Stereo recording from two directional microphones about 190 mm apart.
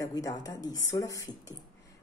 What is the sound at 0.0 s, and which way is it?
A woman's voice, 20° left (ahead or behind).